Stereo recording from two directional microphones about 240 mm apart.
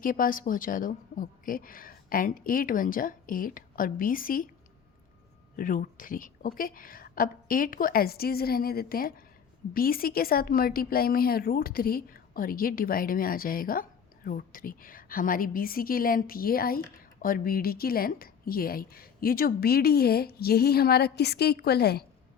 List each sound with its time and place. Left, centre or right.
0.0 s a woman's voice: left
5.5 s a woman's voice: left